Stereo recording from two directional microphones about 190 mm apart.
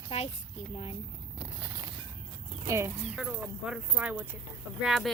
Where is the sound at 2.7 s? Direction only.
15° right (ahead or behind).